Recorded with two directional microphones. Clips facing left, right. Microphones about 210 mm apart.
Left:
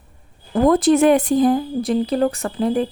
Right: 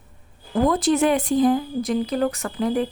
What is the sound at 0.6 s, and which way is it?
Speech, 50° left (ahead or behind).